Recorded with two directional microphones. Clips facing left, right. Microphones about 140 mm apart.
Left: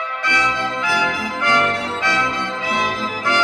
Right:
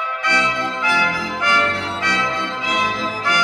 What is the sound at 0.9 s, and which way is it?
Music, 15° left (ahead or behind).